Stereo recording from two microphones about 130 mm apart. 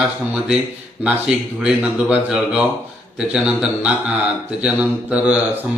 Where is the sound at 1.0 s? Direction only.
5° right (ahead or behind).